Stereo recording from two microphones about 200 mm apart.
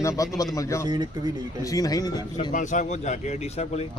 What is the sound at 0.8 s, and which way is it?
Speech, 20° right (ahead or behind).